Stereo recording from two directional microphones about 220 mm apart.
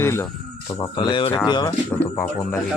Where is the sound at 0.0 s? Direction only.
10° left (ahead or behind).